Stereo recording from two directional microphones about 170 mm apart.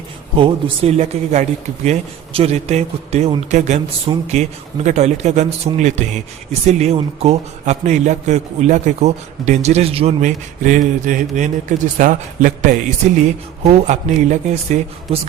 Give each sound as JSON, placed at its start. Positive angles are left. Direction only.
{"t": 0.3, "sound": "speech", "side_deg": -30}
{"t": 13.7, "sound": "speech", "side_deg": -45}